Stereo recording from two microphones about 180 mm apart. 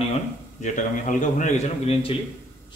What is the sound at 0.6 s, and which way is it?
A man's voice, 45° left (ahead or behind).